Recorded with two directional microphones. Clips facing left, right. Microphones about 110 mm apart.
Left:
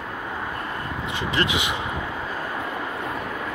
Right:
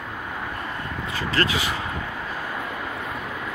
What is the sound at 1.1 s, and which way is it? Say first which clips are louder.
Speech: even; 20° left (ahead or behind).